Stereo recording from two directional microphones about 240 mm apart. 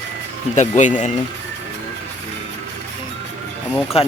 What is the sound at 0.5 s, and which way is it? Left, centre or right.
Speech, left.